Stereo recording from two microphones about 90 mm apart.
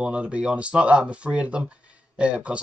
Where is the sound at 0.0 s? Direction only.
10° right (ahead or behind).